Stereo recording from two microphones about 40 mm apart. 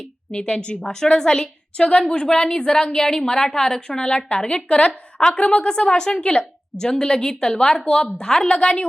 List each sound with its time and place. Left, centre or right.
0.3 s a woman's voice: left